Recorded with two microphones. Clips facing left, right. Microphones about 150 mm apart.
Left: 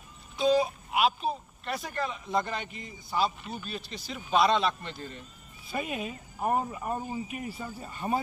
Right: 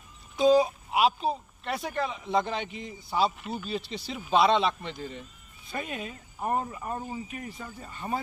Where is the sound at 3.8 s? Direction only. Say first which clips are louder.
Right 4 dB; 30° right (ahead or behind).